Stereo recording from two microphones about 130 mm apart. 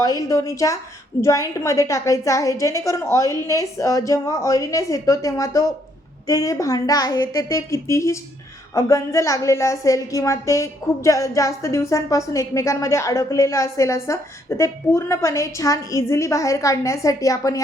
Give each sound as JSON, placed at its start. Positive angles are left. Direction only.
{"t": 0.0, "sound": "a woman's voice", "side_deg": 25}